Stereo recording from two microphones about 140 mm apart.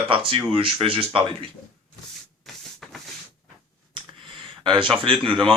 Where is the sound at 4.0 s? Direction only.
35° right (ahead or behind).